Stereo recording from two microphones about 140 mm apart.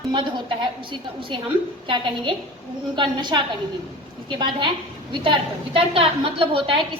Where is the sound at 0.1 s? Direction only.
35° right (ahead or behind).